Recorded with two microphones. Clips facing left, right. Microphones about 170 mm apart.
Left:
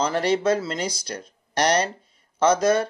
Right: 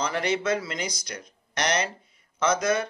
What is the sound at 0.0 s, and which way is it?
Speech, 35° left (ahead or behind).